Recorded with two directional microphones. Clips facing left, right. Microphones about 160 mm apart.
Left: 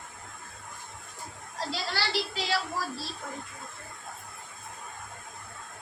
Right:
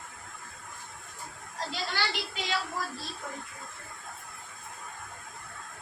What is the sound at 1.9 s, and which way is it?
Television, 35° left (ahead or behind).